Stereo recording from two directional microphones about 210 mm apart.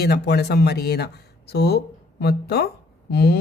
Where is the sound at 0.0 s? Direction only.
50° left (ahead or behind).